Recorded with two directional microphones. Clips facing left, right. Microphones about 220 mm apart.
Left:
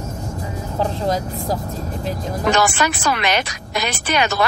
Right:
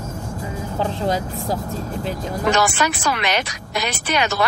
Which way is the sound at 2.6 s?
50° left (ahead or behind).